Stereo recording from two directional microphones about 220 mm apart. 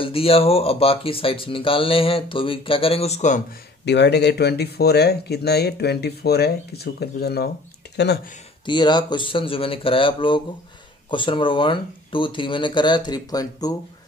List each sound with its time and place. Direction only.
0.0 s speech: 25° left (ahead or behind)
3.8 s speech: 50° left (ahead or behind)
8.6 s speech: 20° left (ahead or behind)